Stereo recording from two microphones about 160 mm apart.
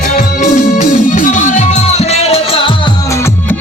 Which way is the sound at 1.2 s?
50° left (ahead or behind).